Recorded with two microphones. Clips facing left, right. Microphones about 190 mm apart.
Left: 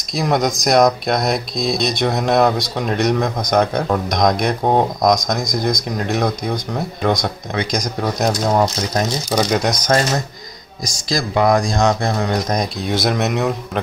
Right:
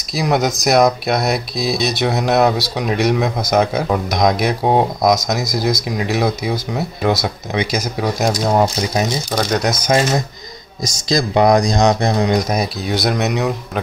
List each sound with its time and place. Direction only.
0.1 s speech: 5° right (ahead or behind)
9.3 s speech: 5° left (ahead or behind)
9.8 s speech: 10° right (ahead or behind)